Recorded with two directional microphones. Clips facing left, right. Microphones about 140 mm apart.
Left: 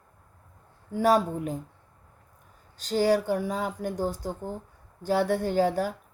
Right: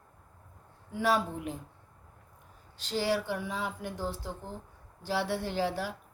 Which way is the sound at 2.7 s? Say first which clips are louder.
Left 7 dB; 45° left (ahead or behind).